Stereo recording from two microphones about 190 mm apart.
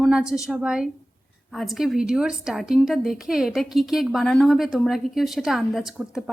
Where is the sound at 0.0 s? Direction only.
5° right (ahead or behind).